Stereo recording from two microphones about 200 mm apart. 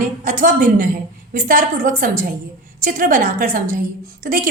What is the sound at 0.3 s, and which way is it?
A woman's voice, 40° right (ahead or behind).